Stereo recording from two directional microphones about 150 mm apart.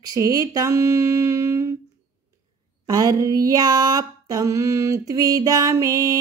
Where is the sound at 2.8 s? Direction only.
25° right (ahead or behind).